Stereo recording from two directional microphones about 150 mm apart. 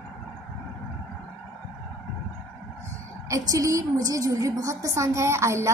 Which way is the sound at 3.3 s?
20° right (ahead or behind).